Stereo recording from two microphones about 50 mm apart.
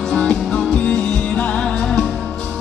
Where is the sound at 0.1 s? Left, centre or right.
Centre.